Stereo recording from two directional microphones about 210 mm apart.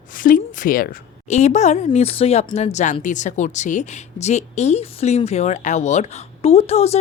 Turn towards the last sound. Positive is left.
turn(degrees=30)  # may be behind; listen again after turning